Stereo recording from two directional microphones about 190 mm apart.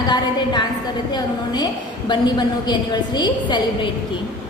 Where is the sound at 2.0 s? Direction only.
25° left (ahead or behind).